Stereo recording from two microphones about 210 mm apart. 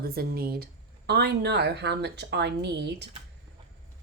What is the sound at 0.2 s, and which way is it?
A woman's voice, 45° right (ahead or behind).